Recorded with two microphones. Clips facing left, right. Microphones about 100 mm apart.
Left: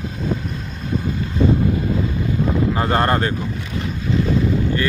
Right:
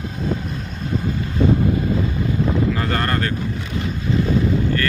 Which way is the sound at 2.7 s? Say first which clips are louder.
Left 4 dB; 25° left (ahead or behind).